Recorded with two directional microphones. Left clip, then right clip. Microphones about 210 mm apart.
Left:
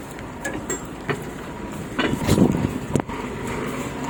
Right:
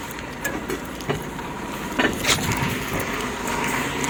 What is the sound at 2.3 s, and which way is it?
Vehicle, 20° left (ahead or behind).